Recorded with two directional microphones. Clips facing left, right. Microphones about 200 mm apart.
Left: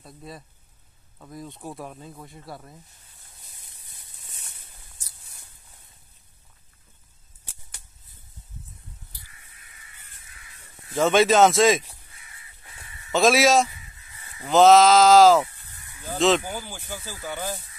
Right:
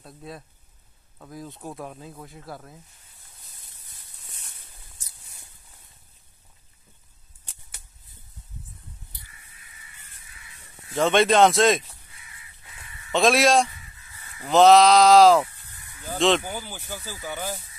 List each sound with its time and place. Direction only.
0.0 s speech: centre (ahead or behind)
11.0 s speech: centre (ahead or behind)
12.4 s a sound: 30° left (ahead or behind)
13.1 s speech: centre (ahead or behind)
17.3 s speech: 10° right (ahead or behind)